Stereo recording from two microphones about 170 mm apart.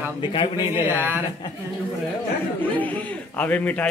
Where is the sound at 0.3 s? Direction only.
30° left (ahead or behind).